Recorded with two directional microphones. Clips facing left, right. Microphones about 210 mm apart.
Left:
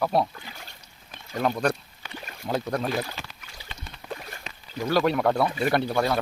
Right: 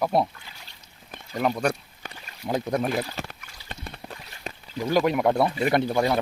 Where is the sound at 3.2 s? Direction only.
50° right (ahead or behind).